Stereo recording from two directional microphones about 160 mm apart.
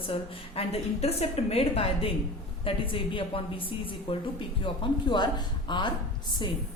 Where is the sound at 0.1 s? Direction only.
40° left (ahead or behind).